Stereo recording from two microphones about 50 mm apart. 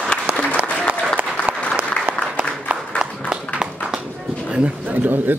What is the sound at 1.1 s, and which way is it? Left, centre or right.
Applause, right.